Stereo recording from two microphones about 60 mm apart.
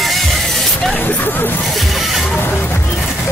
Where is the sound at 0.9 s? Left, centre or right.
Left.